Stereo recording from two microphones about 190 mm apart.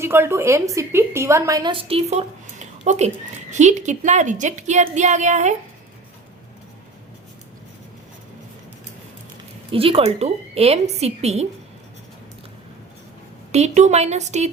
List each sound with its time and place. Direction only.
0.0 s a woman's voice: 15° right (ahead or behind); by 5.5 s 40° right (ahead or behind)
9.7 s a woman's voice: 30° right (ahead or behind)
13.5 s a woman's voice: 35° right (ahead or behind)